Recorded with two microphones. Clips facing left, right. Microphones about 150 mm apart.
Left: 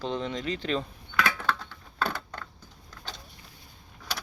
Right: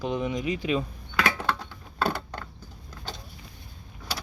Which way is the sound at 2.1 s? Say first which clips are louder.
Right 5 dB; 30° right (ahead or behind).